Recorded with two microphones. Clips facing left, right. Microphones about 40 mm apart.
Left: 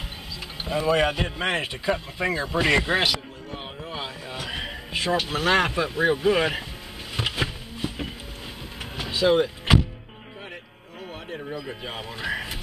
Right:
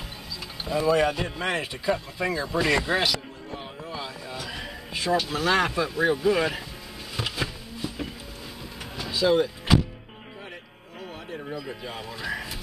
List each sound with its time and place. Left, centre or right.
0.7 s speech: left
7.2 s a sound: left
8.9 s power windows: left
11.5 s speech: left